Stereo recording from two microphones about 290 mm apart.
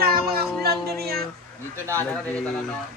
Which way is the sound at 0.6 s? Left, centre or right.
Right.